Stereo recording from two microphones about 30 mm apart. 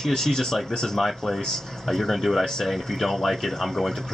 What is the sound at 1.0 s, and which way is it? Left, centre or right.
Speech, centre.